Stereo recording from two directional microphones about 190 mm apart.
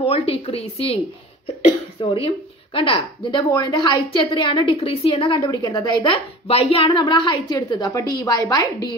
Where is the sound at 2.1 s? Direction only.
30° left (ahead or behind).